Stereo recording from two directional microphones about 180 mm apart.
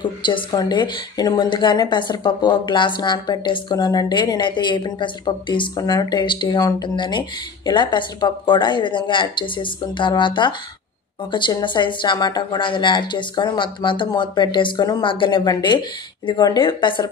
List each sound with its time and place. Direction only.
0.0 s speech: 25° left (ahead or behind)